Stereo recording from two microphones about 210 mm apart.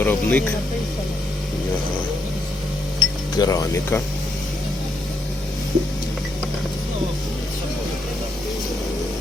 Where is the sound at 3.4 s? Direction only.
15° left (ahead or behind).